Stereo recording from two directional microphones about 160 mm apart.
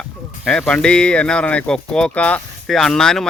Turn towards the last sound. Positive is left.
turn(degrees=5)  # may be behind; listen again after turning